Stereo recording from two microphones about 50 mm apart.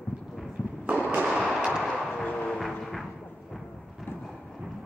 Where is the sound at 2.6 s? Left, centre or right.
Centre.